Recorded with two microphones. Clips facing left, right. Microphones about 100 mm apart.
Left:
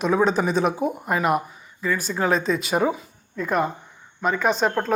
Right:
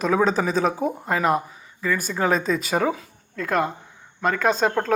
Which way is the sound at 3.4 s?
90° right.